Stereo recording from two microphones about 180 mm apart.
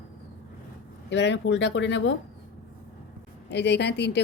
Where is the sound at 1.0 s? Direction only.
75° left (ahead or behind).